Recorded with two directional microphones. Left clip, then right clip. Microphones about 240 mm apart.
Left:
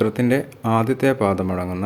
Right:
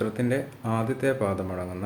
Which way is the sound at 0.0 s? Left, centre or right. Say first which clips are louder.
Left 7 dB; left.